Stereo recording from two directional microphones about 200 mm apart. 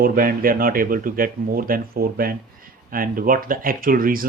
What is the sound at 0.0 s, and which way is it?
Speech, 45° right (ahead or behind).